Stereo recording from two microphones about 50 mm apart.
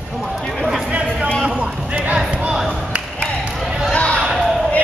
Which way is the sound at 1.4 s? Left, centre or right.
Centre.